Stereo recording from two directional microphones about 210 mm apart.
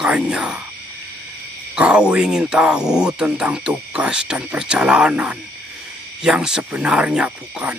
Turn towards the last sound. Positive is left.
turn(degrees=-5)  # may be behind; listen again after turning